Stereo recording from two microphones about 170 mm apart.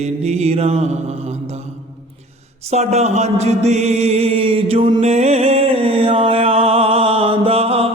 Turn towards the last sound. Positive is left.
turn(degrees=-35)  # may be behind; listen again after turning